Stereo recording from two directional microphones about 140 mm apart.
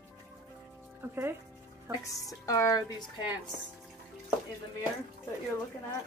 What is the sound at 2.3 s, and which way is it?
Speech, 25° left (ahead or behind).